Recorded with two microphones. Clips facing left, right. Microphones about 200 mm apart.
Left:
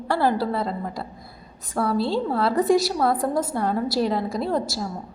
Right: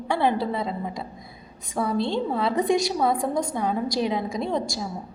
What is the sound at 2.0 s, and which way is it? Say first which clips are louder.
A woman's voice: left 2 dB; 5° left (ahead or behind).